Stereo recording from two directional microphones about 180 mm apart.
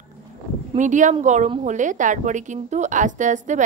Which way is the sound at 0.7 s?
45° right (ahead or behind).